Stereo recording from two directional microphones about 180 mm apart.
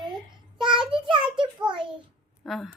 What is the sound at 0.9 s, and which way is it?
Child singing, 30° right (ahead or behind).